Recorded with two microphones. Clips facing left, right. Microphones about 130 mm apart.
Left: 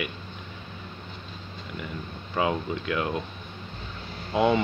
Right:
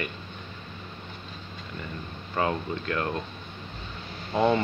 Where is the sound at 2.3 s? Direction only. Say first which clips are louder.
Left 1 dB; 10° left (ahead or behind).